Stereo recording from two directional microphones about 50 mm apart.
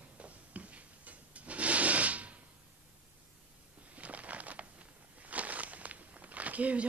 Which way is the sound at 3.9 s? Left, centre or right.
Right.